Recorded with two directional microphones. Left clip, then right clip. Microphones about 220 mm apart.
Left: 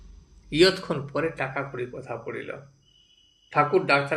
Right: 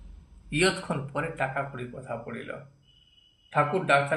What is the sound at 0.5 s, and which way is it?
A man's voice, 25° left (ahead or behind).